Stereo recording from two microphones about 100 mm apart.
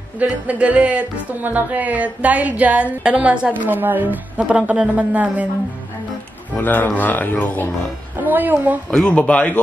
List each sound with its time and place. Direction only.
0.2 s music: 15° right (ahead or behind)
6.5 s speech: 20° left (ahead or behind)
8.2 s a woman's voice: 20° right (ahead or behind)
8.9 s speech: 10° left (ahead or behind)